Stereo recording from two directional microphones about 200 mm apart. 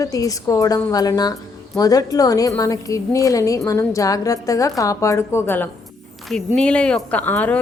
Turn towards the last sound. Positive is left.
turn(degrees=10)  # may be behind; listen again after turning